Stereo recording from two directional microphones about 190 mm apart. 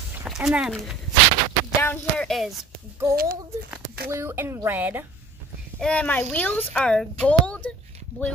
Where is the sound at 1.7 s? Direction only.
10° left (ahead or behind).